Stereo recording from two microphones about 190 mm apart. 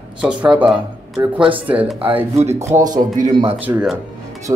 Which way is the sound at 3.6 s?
5° right (ahead or behind).